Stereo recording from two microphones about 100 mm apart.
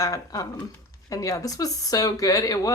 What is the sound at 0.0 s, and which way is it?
Speech, 35° left (ahead or behind).